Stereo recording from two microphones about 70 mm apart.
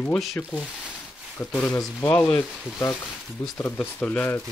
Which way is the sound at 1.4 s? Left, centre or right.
Left.